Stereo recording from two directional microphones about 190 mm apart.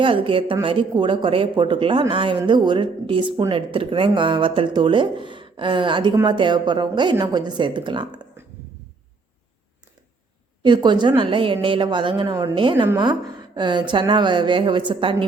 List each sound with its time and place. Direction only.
0.0 s speech: 25° right (ahead or behind)
10.6 s speech: 25° right (ahead or behind)